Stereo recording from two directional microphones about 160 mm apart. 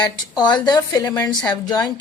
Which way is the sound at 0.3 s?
25° left (ahead or behind).